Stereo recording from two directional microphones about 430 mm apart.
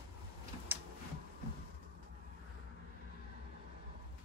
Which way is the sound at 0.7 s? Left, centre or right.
Centre.